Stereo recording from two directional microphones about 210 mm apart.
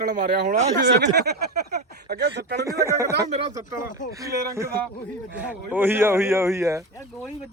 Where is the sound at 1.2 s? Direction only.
50° right (ahead or behind).